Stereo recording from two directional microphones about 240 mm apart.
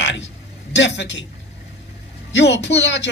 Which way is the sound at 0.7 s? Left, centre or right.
Left.